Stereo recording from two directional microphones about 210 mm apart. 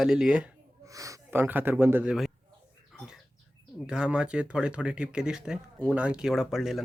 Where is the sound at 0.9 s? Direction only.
15° right (ahead or behind).